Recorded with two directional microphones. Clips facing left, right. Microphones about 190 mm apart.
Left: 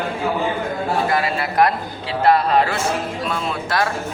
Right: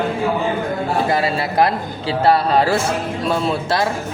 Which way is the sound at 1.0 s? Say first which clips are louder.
Right 2 dB; 30° right (ahead or behind).